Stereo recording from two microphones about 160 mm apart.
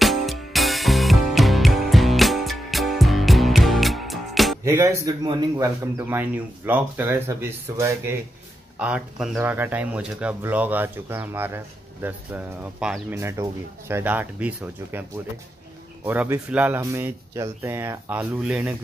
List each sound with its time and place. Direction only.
0.0 s music: centre (ahead or behind)
4.6 s a man's voice: 20° right (ahead or behind)
6.0 s speech: 10° right (ahead or behind)
16.1 s speech: 10° right (ahead or behind)